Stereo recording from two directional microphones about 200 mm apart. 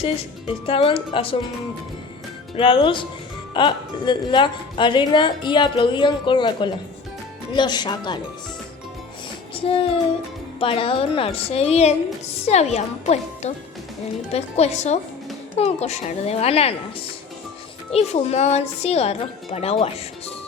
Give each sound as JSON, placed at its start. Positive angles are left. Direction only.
{"t": 0.0, "sound": "a woman's voice", "side_deg": 25}
{"t": 2.6, "sound": "a woman's voice", "side_deg": 25}
{"t": 10.6, "sound": "a woman's voice", "side_deg": 25}
{"t": 17.9, "sound": "a woman's voice", "side_deg": 30}